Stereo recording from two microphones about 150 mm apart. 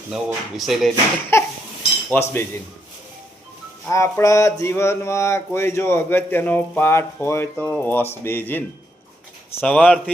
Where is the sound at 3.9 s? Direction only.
20° left (ahead or behind).